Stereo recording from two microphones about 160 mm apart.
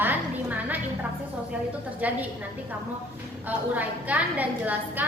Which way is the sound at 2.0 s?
10° right (ahead or behind).